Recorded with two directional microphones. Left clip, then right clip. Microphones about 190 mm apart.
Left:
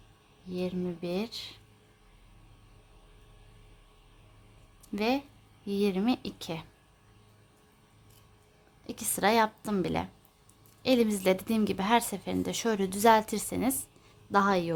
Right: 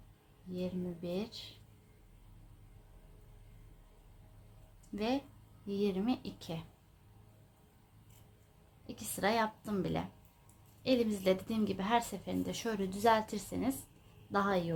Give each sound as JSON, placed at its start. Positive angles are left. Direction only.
{"t": 0.5, "sound": "a woman's voice", "side_deg": 45}
{"t": 4.9, "sound": "a woman's voice", "side_deg": 45}
{"t": 8.9, "sound": "a woman's voice", "side_deg": 55}